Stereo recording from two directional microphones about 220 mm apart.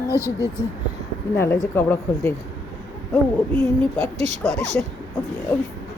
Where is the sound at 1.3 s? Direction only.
10° left (ahead or behind).